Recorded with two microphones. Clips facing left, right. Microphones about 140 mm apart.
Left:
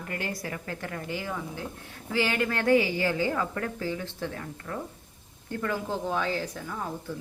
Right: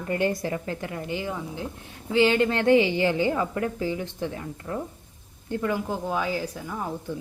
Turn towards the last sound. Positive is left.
turn(degrees=-10)  # may be behind; listen again after turning